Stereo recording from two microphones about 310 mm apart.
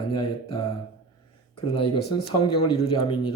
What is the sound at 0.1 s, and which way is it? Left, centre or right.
Speech, centre.